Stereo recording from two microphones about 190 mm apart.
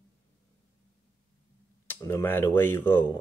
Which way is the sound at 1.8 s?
10° left (ahead or behind).